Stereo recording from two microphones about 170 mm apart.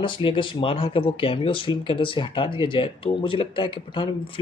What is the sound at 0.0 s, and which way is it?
Speech, 30° left (ahead or behind).